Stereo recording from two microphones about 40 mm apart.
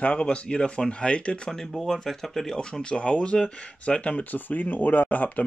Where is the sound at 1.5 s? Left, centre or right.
Centre; by 4.3 s left.